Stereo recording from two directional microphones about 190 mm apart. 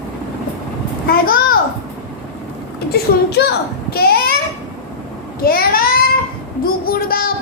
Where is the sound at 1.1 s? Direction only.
50° left (ahead or behind).